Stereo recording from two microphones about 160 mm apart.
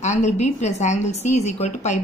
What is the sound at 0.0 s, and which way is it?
A woman's voice, 45° left (ahead or behind).